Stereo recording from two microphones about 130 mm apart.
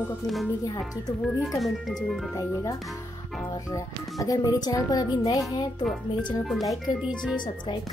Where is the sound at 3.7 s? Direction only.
25° left (ahead or behind).